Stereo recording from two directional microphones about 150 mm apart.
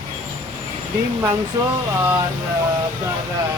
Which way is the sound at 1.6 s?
20° right (ahead or behind).